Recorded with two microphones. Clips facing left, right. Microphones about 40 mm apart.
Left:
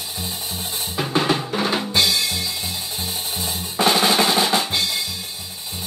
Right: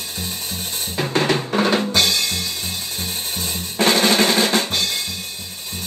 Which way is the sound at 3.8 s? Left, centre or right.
Right.